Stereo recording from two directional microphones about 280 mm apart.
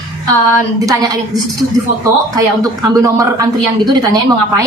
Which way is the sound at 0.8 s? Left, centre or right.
Centre.